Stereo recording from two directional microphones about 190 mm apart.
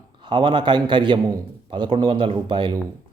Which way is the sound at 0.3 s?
25° right (ahead or behind).